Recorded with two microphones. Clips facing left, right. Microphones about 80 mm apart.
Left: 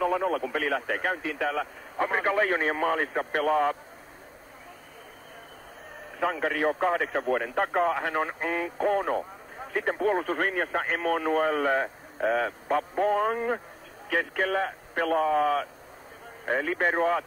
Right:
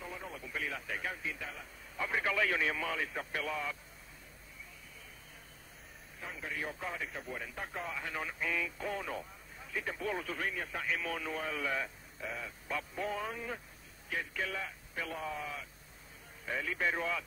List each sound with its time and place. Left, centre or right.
0.0 s speech: left
2.0 s a man's voice: left
6.1 s a man's voice: left
14.0 s a man's voice: left
16.4 s a man's voice: left